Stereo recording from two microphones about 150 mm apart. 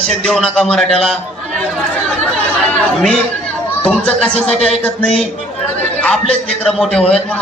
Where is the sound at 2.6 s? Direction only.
5° left (ahead or behind).